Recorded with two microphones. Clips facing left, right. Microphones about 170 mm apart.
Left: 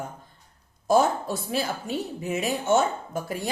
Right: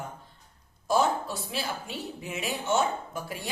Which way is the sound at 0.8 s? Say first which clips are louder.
Left 4 dB; 45° left (ahead or behind).